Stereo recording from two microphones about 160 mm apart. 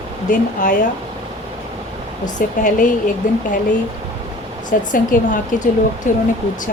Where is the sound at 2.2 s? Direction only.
55° left (ahead or behind).